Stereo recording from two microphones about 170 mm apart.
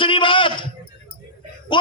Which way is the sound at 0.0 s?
30° left (ahead or behind).